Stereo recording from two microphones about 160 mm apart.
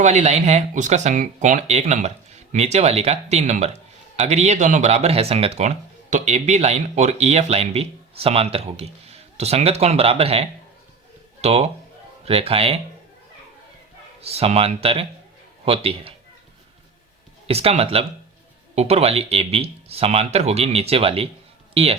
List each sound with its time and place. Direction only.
0.0 s speech: 45° right (ahead or behind)
14.2 s speech: 40° right (ahead or behind)
17.4 s speech: 40° right (ahead or behind)